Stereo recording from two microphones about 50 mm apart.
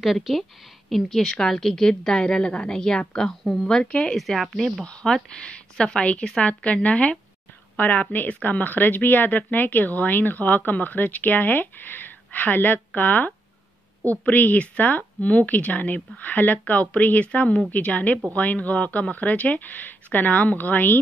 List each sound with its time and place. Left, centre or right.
0.0 s a woman's voice: centre
4.2 s speech: centre
5.0 s a woman's voice: centre; by 13.3 s left
14.3 s speech: left